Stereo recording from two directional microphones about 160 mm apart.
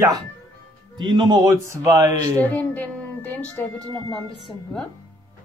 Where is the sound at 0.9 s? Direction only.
30° right (ahead or behind).